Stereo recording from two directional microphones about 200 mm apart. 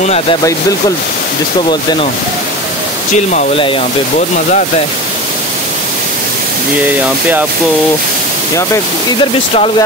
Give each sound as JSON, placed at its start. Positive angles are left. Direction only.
{"t": 0.0, "sound": "speech", "side_deg": 30}
{"t": 3.5, "sound": "speech", "side_deg": 25}
{"t": 9.2, "sound": "speech", "side_deg": 25}